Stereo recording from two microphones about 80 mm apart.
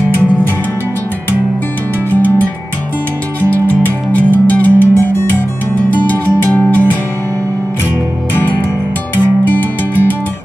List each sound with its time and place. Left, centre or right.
3.6 s music: left
9.1 s music: left